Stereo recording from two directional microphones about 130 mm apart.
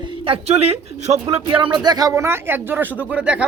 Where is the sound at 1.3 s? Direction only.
40° right (ahead or behind).